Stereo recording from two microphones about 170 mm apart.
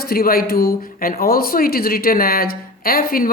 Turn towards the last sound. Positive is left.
turn(degrees=60)  # may be behind; listen again after turning